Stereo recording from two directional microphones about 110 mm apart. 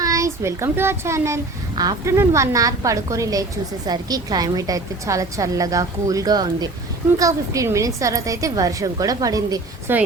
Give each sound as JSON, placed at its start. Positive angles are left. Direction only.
{"t": 0.0, "sound": "a child's voice", "side_deg": -30}
{"t": 1.7, "sound": "speech", "side_deg": -40}
{"t": 2.0, "sound": "a woman's voice", "side_deg": -25}